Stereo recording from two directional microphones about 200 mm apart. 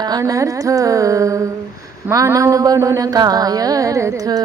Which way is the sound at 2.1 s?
15° right (ahead or behind).